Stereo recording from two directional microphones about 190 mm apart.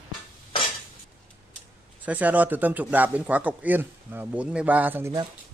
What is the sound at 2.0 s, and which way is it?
Speech, 10° right (ahead or behind).